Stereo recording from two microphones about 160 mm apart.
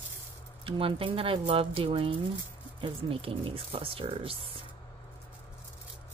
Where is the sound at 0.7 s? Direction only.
35° right (ahead or behind).